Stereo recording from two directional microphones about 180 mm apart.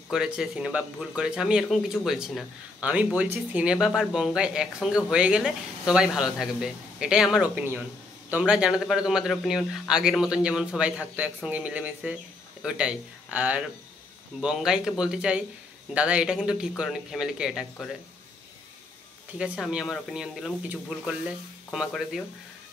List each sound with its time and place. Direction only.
0.1 s speech: 5° right (ahead or behind)
19.3 s speech: 5° right (ahead or behind)